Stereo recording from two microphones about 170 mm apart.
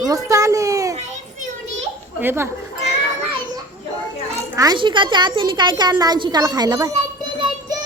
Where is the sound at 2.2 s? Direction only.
15° right (ahead or behind).